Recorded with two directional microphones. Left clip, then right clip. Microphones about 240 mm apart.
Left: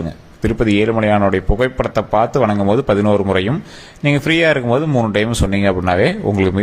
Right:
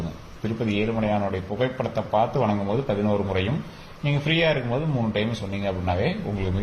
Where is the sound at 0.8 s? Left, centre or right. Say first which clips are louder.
Left 10 dB; left.